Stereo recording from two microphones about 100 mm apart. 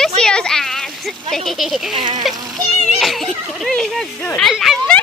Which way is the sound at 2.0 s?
50° right (ahead or behind).